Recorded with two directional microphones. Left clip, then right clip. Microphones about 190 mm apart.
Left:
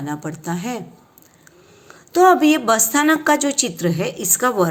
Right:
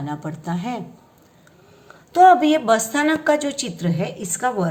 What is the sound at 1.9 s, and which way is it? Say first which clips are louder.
A woman's voice: right 1 dB; 10° left (ahead or behind).